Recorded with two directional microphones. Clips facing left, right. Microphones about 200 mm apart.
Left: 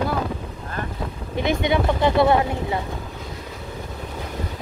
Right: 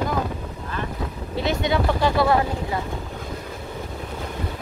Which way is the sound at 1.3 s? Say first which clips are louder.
Left 2 dB; 15° left (ahead or behind).